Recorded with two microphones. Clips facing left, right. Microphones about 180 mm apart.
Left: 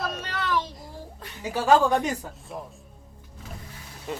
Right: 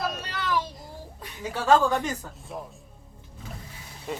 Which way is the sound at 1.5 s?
10° left (ahead or behind).